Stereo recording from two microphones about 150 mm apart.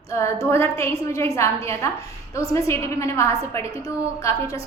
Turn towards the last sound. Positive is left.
turn(degrees=20)  # may be behind; listen again after turning